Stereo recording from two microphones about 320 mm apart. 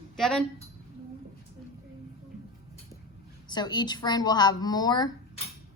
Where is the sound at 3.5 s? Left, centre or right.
Centre.